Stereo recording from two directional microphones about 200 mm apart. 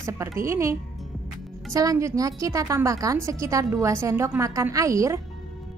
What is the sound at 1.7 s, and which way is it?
Speech, 15° right (ahead or behind).